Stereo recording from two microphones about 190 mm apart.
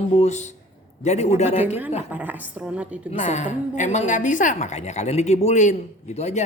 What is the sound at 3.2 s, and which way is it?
A woman's voice, 40° left (ahead or behind).